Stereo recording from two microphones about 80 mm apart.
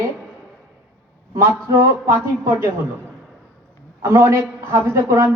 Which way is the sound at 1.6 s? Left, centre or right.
Right.